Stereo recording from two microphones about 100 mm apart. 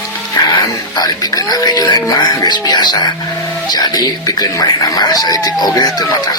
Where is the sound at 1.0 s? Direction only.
40° left (ahead or behind).